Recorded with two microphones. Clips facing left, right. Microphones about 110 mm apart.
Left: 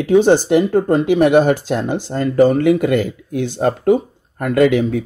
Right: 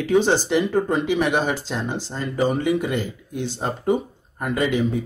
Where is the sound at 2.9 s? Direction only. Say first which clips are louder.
Left 9 dB; 65° left (ahead or behind).